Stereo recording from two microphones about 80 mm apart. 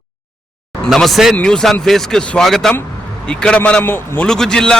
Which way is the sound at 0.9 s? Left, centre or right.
Centre.